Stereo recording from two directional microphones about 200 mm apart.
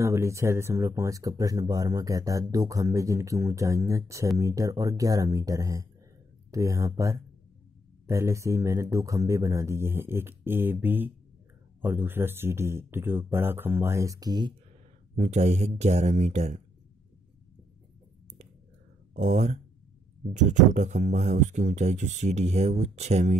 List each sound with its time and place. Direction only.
0.0 s speech: 15° right (ahead or behind)
15.1 s speech: 35° right (ahead or behind)
19.1 s speech: 35° right (ahead or behind)